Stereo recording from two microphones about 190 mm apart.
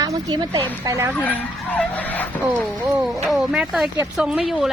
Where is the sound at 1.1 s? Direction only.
10° left (ahead or behind).